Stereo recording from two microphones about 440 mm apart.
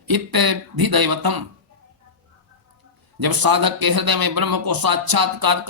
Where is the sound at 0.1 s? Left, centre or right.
Right.